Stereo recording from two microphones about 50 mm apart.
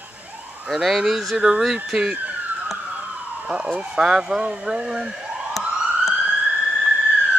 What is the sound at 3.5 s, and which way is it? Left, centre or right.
Speech, right.